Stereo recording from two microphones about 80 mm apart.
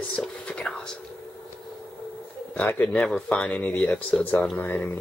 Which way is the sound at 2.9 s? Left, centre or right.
Centre.